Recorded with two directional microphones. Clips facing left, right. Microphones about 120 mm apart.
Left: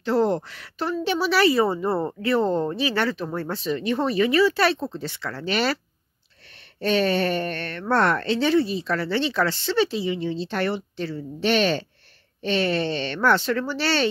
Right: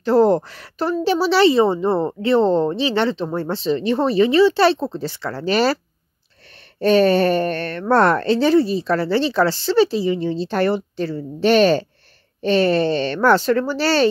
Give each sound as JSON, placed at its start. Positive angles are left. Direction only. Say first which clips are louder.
{"t": 0.0, "sound": "a woman's voice", "louder": "right 7 dB", "side_deg": -40}
{"t": 6.8, "sound": "speech", "louder": "right 7 dB", "side_deg": -40}